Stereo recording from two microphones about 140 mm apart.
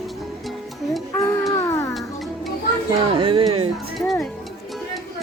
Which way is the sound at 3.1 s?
40° right (ahead or behind).